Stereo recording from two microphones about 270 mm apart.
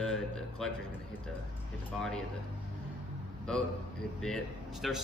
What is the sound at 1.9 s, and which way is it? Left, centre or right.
Speech, centre.